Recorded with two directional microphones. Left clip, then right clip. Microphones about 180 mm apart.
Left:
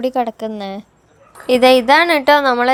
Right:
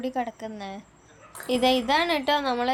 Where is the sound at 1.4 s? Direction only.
35° left (ahead or behind).